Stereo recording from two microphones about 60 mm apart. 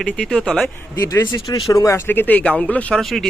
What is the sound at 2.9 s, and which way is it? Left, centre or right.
Speech, centre.